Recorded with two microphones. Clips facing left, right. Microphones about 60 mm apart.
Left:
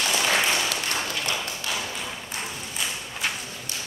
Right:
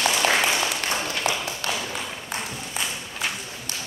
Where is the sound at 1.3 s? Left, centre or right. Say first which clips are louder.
Right 6 dB; right.